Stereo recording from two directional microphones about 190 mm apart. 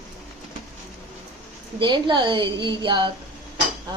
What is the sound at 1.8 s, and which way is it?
A woman's voice, 25° right (ahead or behind).